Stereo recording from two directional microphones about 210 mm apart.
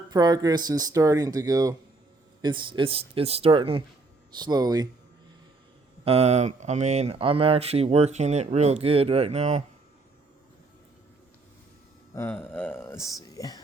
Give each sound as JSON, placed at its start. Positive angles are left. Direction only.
{"t": 0.1, "sound": "a man's voice", "side_deg": -20}
{"t": 6.1, "sound": "speech", "side_deg": -30}
{"t": 12.1, "sound": "speech", "side_deg": 10}